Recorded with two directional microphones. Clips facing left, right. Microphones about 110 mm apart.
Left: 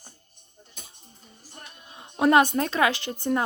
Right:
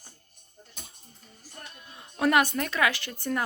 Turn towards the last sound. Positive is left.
turn(degrees=25)  # may be behind; listen again after turning